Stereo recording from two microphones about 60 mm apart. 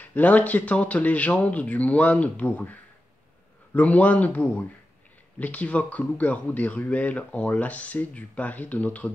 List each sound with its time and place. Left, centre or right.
0.0 s speech: left